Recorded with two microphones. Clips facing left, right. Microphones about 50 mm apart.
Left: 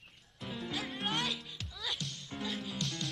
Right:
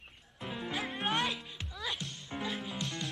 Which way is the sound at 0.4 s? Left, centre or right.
Centre.